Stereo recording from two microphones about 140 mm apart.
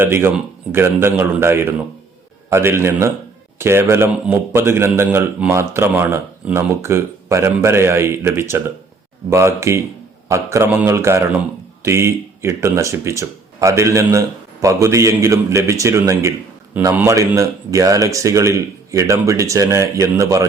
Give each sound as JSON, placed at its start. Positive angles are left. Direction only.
{"t": 0.0, "sound": "a man's voice", "side_deg": -15}